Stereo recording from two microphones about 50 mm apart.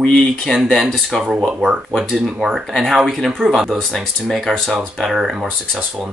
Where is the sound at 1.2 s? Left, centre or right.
Centre.